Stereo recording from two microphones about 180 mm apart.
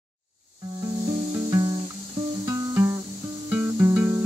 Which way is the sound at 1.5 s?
25° right (ahead or behind).